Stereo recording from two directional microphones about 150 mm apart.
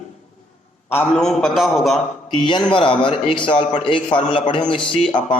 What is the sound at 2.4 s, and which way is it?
A man's voice, 30° left (ahead or behind).